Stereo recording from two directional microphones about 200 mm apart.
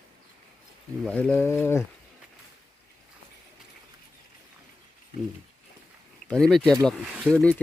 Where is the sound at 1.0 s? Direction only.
5° left (ahead or behind).